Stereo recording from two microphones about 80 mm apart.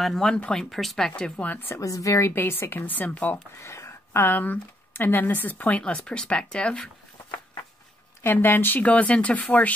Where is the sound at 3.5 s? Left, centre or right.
Left.